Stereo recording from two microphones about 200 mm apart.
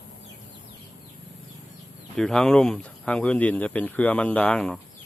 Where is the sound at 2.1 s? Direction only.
5° left (ahead or behind).